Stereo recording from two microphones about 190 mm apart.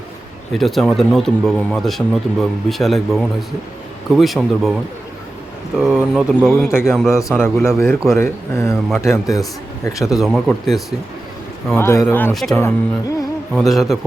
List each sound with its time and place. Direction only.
0.5 s speech: centre (ahead or behind)
5.9 s speech: centre (ahead or behind)
6.7 s speech: 15° left (ahead or behind)
9.9 s speech: centre (ahead or behind)
11.7 s speech: 15° left (ahead or behind)
12.5 s speech: 15° left (ahead or behind)
13.5 s speech: centre (ahead or behind)